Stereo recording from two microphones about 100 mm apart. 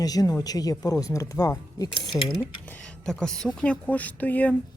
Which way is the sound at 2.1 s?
20° left (ahead or behind).